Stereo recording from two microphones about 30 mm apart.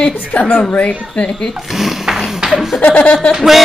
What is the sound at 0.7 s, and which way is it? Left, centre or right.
Speech, left.